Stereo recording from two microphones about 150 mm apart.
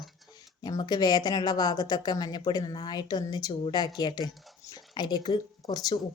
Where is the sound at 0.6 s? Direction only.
25° left (ahead or behind).